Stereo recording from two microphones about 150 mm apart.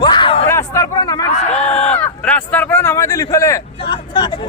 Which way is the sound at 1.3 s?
50° left (ahead or behind).